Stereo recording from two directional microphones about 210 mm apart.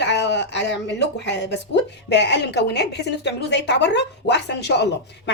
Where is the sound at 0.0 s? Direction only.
55° left (ahead or behind).